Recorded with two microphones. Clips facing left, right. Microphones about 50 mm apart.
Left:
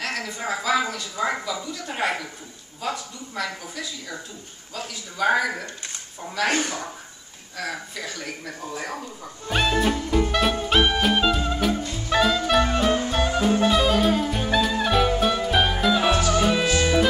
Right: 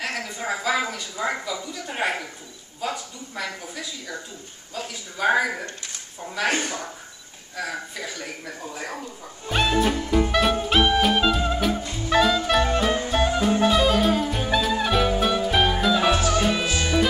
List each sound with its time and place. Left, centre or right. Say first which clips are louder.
0.0 s a woman's voice: even; centre
4.8 s a man's voice: even; centre
7.5 s a man's voice: right 1 dB; centre
9.5 s music: even; centre